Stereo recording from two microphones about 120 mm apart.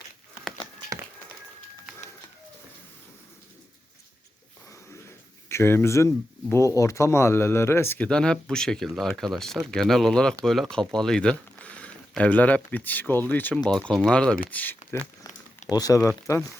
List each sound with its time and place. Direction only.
5.5 s speech: 20° left (ahead or behind)
15.7 s speech: 30° left (ahead or behind)